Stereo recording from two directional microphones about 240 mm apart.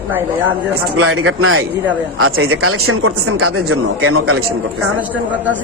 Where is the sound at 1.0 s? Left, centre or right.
Right.